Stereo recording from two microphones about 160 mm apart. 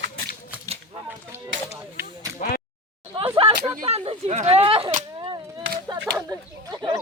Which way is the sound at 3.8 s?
40° right (ahead or behind).